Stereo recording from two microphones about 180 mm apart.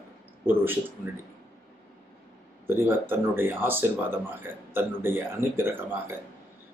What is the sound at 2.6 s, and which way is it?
Speech, 10° right (ahead or behind).